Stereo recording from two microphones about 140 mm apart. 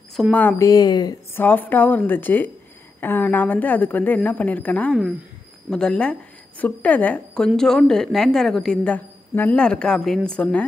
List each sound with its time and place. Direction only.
0.1 s speech: centre (ahead or behind)
0.4 s speech: 15° left (ahead or behind)
0.7 s a woman's voice: 30° left (ahead or behind)
1.3 s a woman's voice: 15° left (ahead or behind)